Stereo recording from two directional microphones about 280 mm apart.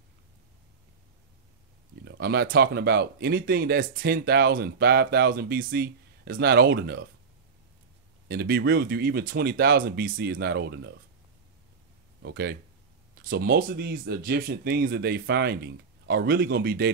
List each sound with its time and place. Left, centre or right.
2.0 s speech: right
8.3 s speech: right
12.2 s speech: right